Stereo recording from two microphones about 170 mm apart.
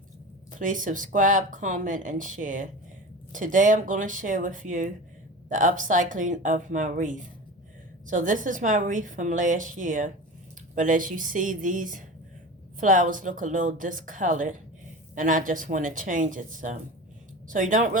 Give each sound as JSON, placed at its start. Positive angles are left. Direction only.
{"t": 0.6, "sound": "speech", "side_deg": -50}